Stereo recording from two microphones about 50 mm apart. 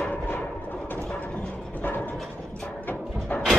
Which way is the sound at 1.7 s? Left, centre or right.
Left.